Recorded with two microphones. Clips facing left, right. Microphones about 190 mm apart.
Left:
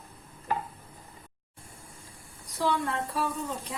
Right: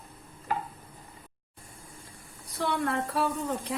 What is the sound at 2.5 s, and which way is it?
Speech, 60° right (ahead or behind).